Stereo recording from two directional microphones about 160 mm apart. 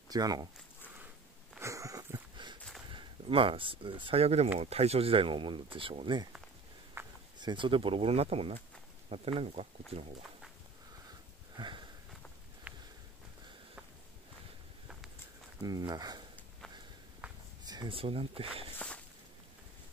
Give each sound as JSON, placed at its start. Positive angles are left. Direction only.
{"t": 0.1, "sound": "speech", "side_deg": -25}
{"t": 1.6, "sound": "a sound", "side_deg": -20}
{"t": 2.9, "sound": "speech", "side_deg": -30}
{"t": 7.0, "sound": "a sound", "side_deg": -15}
{"t": 7.3, "sound": "speech", "side_deg": -30}
{"t": 11.5, "sound": "sniff", "side_deg": -30}
{"t": 15.6, "sound": "speech", "side_deg": -25}
{"t": 17.2, "sound": "walk", "side_deg": -10}
{"t": 17.6, "sound": "speech", "side_deg": -30}